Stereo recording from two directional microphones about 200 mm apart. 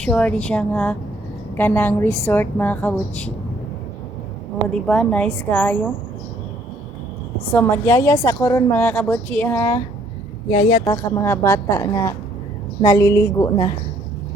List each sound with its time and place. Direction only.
0.0 s a woman's voice: 5° left (ahead or behind)
4.7 s a woman's voice: 5° left (ahead or behind)
7.5 s a woman's voice: 10° left (ahead or behind)
10.5 s a woman's voice: 30° left (ahead or behind)
10.9 s a woman's voice: 15° left (ahead or behind)